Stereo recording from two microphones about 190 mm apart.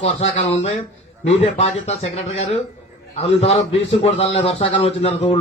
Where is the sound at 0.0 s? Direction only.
35° left (ahead or behind).